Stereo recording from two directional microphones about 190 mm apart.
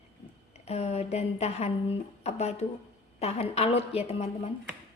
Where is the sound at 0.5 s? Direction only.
35° left (ahead or behind).